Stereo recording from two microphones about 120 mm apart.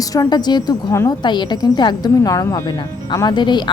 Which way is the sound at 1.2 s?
40° left (ahead or behind).